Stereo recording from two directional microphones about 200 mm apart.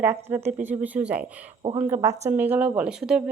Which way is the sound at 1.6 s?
20° right (ahead or behind).